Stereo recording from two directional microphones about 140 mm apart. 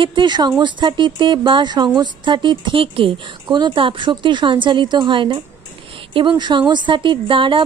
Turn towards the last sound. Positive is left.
turn(degrees=-40)  # may be behind; listen again after turning